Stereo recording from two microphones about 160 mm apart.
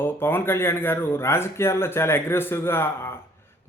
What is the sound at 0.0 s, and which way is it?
A man's voice, 15° left (ahead or behind).